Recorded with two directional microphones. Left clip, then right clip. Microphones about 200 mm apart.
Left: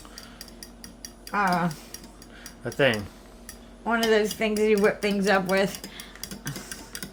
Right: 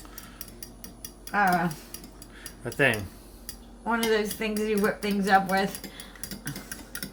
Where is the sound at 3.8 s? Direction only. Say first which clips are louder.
Left 3 dB; 40° left (ahead or behind).